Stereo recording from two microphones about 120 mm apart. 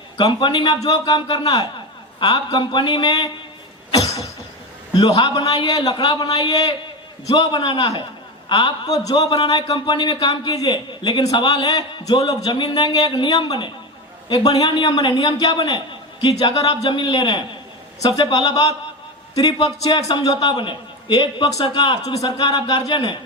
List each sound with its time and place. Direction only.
0.2 s a man's voice: 40° left (ahead or behind)
3.9 s a sound: 30° left (ahead or behind)
4.9 s a man's voice: 35° left (ahead or behind)